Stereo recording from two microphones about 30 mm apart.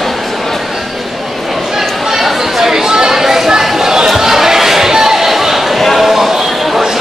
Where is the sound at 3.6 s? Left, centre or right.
Centre.